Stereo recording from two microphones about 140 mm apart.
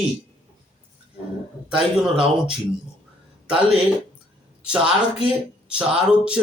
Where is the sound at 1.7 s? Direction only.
5° right (ahead or behind).